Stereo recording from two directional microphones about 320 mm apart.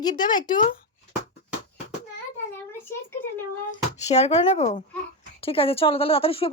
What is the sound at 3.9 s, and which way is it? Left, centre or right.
A woman's voice, left.